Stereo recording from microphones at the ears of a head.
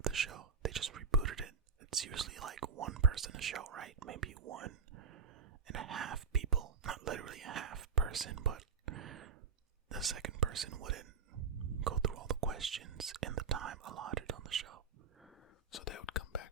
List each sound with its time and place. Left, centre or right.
0.0 s whispering: right
15.7 s whispering: left